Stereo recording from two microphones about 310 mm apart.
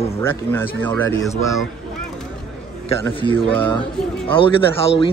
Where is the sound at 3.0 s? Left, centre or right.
Centre.